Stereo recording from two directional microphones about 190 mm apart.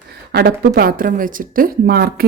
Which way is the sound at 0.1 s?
55° right (ahead or behind).